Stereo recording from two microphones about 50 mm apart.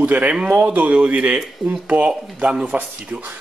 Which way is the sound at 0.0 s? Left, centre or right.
Right.